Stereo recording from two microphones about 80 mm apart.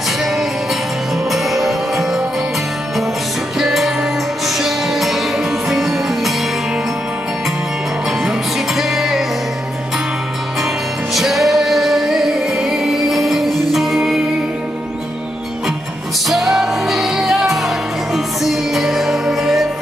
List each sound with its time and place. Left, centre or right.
1.3 s music: centre
3.5 s music: centre
8.3 s music: centre
11.1 s music: centre
16.5 s music: centre